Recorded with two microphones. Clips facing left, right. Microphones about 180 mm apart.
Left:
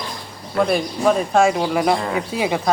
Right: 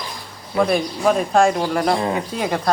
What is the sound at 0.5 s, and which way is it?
Speech, centre (ahead or behind).